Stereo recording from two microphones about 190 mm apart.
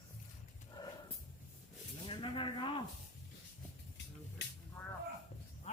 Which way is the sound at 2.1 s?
25° left (ahead or behind).